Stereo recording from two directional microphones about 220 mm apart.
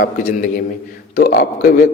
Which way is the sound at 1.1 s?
40° left (ahead or behind).